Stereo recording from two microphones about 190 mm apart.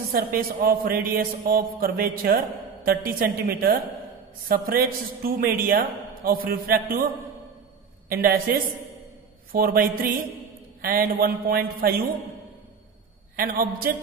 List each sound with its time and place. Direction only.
0.1 s a man's voice: 50° right (ahead or behind)
8.1 s a man's voice: 50° right (ahead or behind)
13.4 s a man's voice: 50° right (ahead or behind)